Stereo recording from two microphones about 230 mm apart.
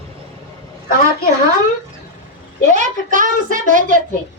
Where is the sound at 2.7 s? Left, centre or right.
Right.